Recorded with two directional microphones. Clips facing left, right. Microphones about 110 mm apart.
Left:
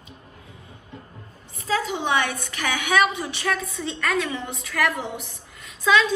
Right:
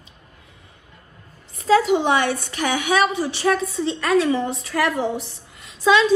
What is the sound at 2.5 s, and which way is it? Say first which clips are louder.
Speech: right 1 dB; 20° right (ahead or behind).